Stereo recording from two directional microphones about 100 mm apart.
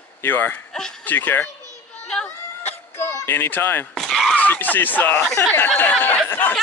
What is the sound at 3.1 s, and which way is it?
Speech, 25° left (ahead or behind).